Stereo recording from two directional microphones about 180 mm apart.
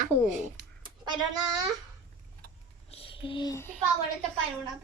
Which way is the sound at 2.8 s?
30° left (ahead or behind).